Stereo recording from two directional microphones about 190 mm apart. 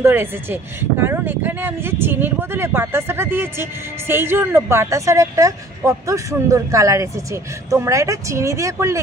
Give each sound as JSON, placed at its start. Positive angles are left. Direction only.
{"t": 0.0, "sound": "speech", "side_deg": -10}